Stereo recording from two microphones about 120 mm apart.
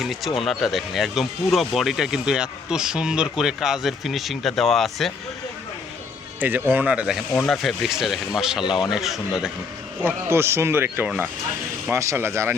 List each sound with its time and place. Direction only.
0.0 s speech: centre (ahead or behind)
6.4 s speech: 15° right (ahead or behind)
7.3 s speech: 5° left (ahead or behind)
8.6 s speech: 40° left (ahead or behind)
8.9 s speech: centre (ahead or behind)
10.2 s speech: 20° right (ahead or behind)